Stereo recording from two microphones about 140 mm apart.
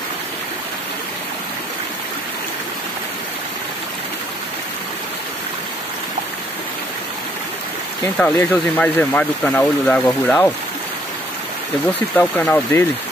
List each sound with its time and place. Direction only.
8.2 s speech: 15° left (ahead or behind)
12.2 s speech: 10° left (ahead or behind)